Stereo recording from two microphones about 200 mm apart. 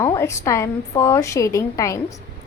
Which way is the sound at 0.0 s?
15° left (ahead or behind).